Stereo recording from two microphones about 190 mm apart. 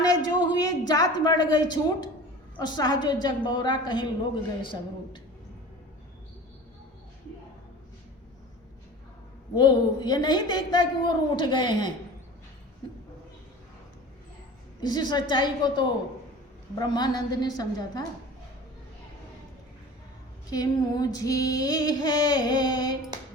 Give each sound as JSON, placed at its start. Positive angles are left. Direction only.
{"t": 0.0, "sound": "a sound", "side_deg": 20}
{"t": 2.6, "sound": "female singing", "side_deg": 20}
{"t": 9.6, "sound": "female singing", "side_deg": 20}
{"t": 14.8, "sound": "female singing", "side_deg": 20}
{"t": 20.5, "sound": "female singing", "side_deg": 20}